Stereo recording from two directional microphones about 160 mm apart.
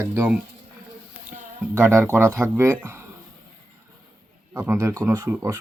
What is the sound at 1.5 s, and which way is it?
Speech, 15° right (ahead or behind).